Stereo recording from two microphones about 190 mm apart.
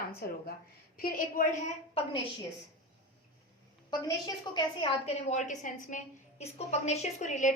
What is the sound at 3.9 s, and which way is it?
A woman's voice, 20° left (ahead or behind).